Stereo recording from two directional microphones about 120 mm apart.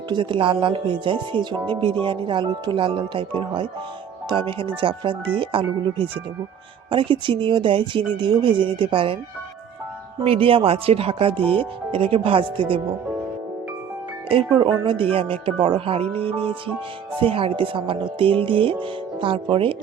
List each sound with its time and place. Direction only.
0.1 s speech: 45° right (ahead or behind)
10.2 s speech: 50° right (ahead or behind)
14.3 s speech: 45° right (ahead or behind)